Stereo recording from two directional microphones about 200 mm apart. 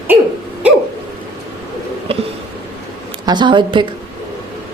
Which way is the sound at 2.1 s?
30° right (ahead or behind).